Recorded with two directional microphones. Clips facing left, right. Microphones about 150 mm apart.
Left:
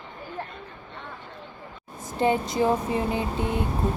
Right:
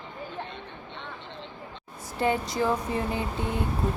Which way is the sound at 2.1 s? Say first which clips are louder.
Left 3 dB; 20° left (ahead or behind).